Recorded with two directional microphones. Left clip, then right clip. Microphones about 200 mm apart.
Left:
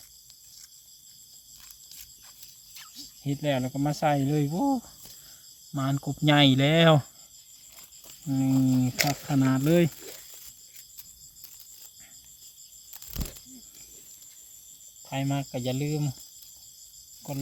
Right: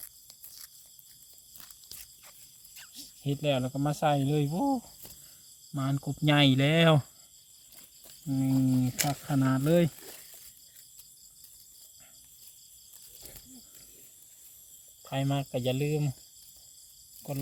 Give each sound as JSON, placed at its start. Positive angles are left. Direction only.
{"t": 1.5, "sound": "a sound", "side_deg": -35}
{"t": 2.7, "sound": "speech", "side_deg": -20}
{"t": 15.0, "sound": "speech", "side_deg": -25}